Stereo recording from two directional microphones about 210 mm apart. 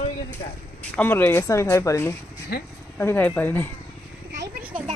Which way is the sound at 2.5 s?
45° left (ahead or behind).